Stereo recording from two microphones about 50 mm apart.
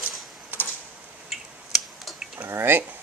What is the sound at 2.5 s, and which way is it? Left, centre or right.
Speech, right.